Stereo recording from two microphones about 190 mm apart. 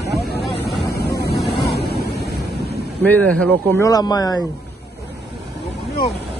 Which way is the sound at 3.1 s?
5° left (ahead or behind).